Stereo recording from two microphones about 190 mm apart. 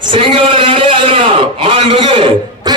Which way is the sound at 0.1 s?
25° right (ahead or behind).